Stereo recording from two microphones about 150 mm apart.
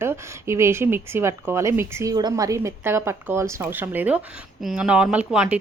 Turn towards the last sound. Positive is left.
turn(degrees=-5)  # may be behind; listen again after turning